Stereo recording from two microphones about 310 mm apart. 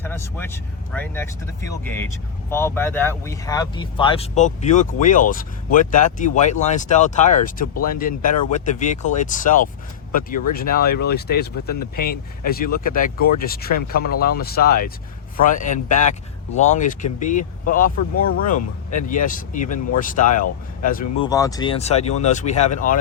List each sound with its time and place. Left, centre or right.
0.0 s speech: centre; by 21.0 s left
21.2 s speech: centre